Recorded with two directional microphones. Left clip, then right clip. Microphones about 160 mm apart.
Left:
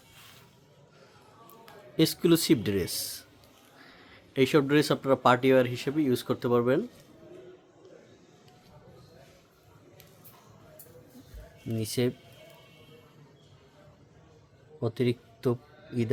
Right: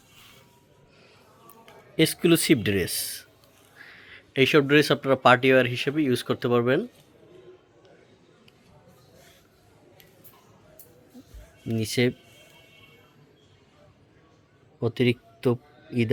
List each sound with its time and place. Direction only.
2.0 s speech: centre (ahead or behind)
11.7 s speech: 15° right (ahead or behind)
14.8 s a man's voice: 10° right (ahead or behind)